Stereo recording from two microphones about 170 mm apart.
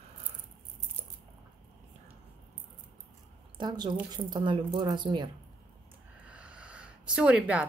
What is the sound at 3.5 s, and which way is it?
A woman's voice, 25° right (ahead or behind).